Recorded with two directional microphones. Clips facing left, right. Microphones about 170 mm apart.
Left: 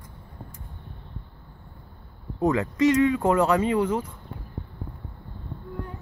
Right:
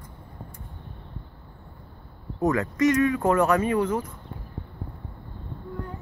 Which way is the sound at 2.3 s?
15° left (ahead or behind).